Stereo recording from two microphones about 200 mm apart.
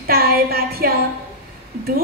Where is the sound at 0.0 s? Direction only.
50° right (ahead or behind).